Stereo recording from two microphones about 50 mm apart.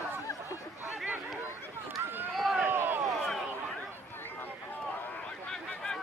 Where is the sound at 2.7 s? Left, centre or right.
Right.